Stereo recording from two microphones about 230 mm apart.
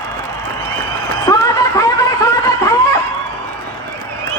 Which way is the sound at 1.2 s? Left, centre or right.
Centre.